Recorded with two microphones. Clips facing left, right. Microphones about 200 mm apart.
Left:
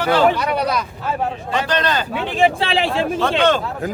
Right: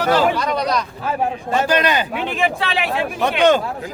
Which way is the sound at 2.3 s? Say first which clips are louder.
Left 6 dB; 30° left (ahead or behind).